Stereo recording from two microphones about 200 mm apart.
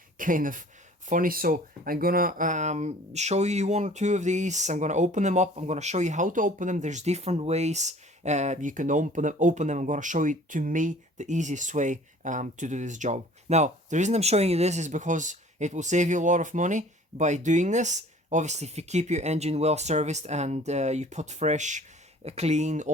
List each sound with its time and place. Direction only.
0.2 s speech: 40° right (ahead or behind)